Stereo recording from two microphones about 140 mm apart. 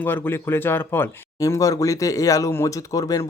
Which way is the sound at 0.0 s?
15° left (ahead or behind).